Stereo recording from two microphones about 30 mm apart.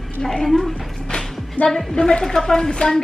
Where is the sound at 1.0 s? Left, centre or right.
Centre.